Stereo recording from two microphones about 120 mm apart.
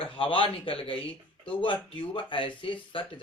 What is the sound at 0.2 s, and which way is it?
Speech, 45° left (ahead or behind).